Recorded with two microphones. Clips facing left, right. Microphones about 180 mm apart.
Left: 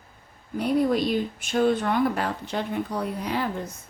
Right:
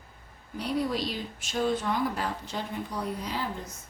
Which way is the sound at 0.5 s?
55° left (ahead or behind).